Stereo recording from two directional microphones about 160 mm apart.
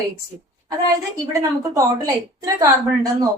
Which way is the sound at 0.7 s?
20° right (ahead or behind).